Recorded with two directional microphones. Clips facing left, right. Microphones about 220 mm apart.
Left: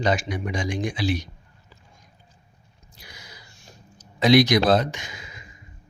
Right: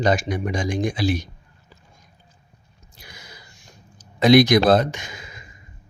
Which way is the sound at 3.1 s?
50° right (ahead or behind).